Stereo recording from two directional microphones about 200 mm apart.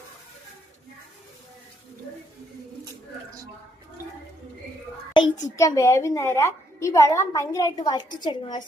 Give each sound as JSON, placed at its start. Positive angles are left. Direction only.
{"t": 5.1, "sound": "a woman's voice", "side_deg": 20}